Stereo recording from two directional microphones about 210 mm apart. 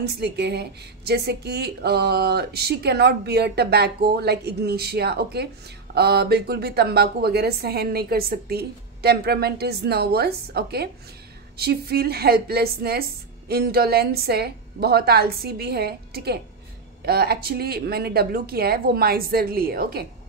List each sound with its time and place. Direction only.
0.0 s speech: 50° right (ahead or behind)